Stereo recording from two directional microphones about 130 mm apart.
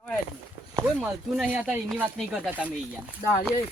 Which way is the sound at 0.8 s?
10° right (ahead or behind).